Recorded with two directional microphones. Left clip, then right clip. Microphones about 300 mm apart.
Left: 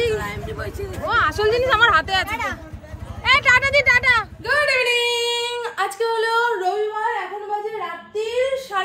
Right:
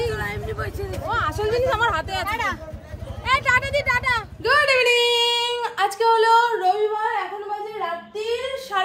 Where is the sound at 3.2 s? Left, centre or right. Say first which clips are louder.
Left 4 dB; left.